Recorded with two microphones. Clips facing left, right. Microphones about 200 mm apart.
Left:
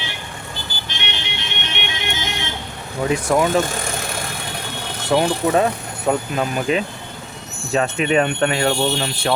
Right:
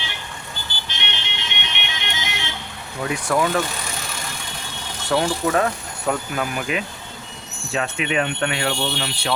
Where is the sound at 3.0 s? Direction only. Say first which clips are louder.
Left 4 dB; 25° left (ahead or behind).